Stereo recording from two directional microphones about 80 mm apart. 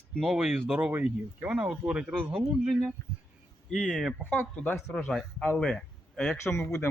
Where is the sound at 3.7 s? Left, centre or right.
Centre.